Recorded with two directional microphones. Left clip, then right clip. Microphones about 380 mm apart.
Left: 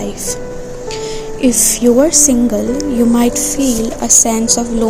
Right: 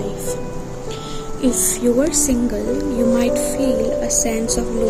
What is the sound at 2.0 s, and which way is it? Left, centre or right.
Speech, centre.